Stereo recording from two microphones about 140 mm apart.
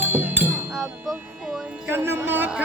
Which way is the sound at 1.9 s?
15° right (ahead or behind).